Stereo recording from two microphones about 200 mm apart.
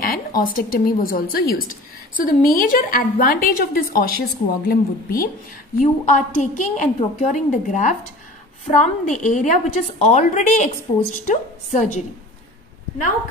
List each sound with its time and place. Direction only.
0.0 s a woman's voice: 45° left (ahead or behind)